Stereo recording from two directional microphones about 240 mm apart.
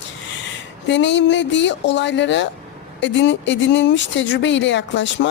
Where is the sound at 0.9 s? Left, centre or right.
Left.